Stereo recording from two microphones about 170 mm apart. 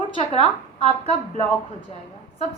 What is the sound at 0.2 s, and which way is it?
A woman's voice, 35° left (ahead or behind).